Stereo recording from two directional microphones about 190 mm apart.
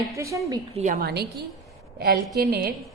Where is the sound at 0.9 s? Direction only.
55° right (ahead or behind).